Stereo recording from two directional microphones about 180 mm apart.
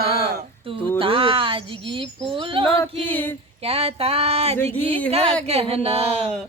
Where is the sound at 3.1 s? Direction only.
10° left (ahead or behind).